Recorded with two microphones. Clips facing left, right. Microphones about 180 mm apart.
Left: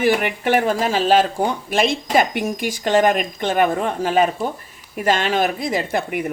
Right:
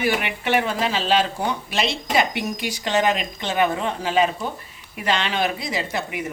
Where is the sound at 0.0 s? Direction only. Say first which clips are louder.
Left 5 dB; 45° left (ahead or behind).